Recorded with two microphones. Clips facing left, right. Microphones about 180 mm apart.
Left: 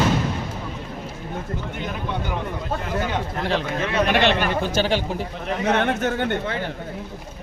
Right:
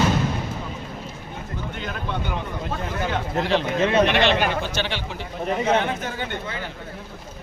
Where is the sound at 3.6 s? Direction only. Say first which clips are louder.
Right 4 dB; 25° right (ahead or behind).